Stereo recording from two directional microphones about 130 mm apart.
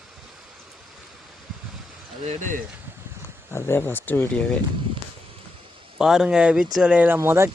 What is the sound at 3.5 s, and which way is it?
Speech, 20° left (ahead or behind).